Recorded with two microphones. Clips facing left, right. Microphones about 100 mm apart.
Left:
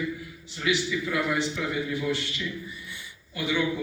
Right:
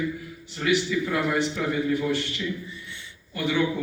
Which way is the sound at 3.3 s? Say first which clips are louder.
Right 2 dB; 45° right (ahead or behind).